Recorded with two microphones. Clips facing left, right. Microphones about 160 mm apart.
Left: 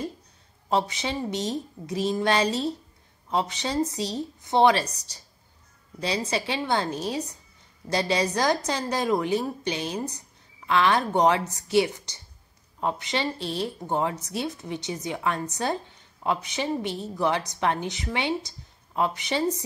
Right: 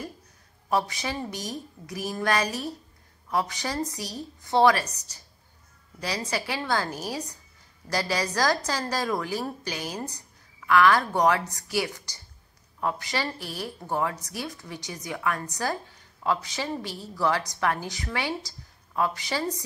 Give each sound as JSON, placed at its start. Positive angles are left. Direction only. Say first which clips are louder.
{"t": 0.7, "sound": "a woman's voice", "louder": "left 1 dB", "side_deg": 25}